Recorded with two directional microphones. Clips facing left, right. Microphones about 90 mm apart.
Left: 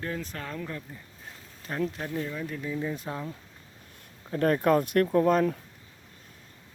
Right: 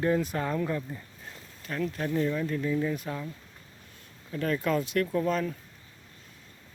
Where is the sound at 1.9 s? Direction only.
5° left (ahead or behind).